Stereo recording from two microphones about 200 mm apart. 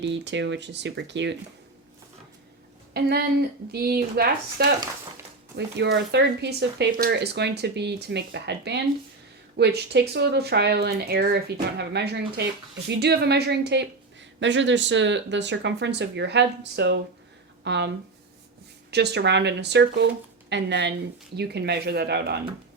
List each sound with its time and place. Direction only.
0.0 s a woman's voice: 60° right (ahead or behind)
2.9 s a woman's voice: 50° right (ahead or behind)